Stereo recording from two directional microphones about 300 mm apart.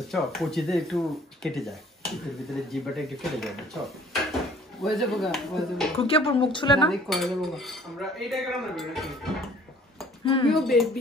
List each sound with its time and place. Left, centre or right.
0.1 s speech: centre
5.9 s a woman's voice: centre
6.9 s speech: centre
10.2 s a woman's voice: centre
10.5 s speech: centre